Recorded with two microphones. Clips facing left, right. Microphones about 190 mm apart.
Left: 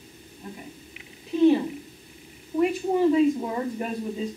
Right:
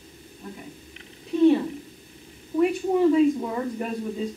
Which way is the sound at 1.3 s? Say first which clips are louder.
Right 1 dB; centre (ahead or behind).